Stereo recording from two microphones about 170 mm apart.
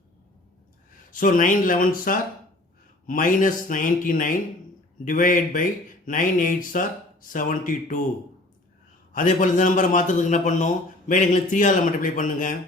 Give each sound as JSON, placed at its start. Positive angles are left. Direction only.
{"t": 1.1, "sound": "speech", "side_deg": 50}
{"t": 9.1, "sound": "speech", "side_deg": 50}